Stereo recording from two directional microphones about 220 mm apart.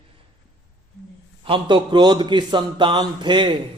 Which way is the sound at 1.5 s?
20° right (ahead or behind).